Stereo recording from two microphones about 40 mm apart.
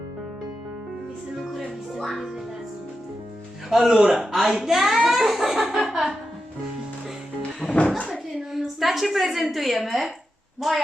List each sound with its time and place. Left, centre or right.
1.4 s music: centre
3.7 s a woman's voice: centre
5.7 s a sound: centre
7.6 s music: right
8.5 s a woman's voice: centre